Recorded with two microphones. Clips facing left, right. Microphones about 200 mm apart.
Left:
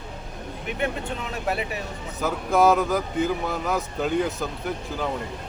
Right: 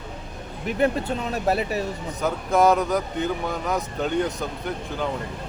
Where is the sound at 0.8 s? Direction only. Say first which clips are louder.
Right 6 dB; 40° right (ahead or behind).